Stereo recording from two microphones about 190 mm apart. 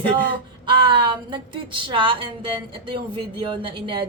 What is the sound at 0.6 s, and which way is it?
A woman's voice, 25° right (ahead or behind).